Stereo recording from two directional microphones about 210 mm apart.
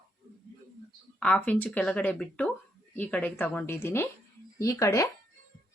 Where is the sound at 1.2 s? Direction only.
5° left (ahead or behind).